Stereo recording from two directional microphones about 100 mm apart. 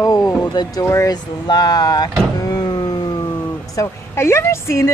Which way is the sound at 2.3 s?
40° left (ahead or behind).